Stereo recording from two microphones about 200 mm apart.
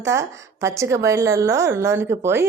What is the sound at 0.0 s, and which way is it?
A woman's voice, 15° right (ahead or behind).